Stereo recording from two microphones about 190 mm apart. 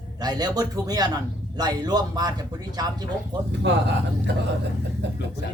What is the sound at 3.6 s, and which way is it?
Speech, 70° right (ahead or behind).